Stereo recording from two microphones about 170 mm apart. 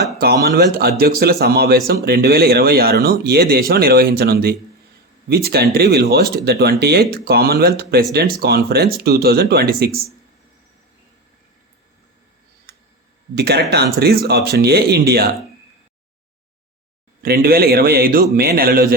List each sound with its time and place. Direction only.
0.4 s a man's voice: 65° right (ahead or behind)
13.3 s speech: 75° right (ahead or behind)
17.2 s a man's voice: 65° right (ahead or behind)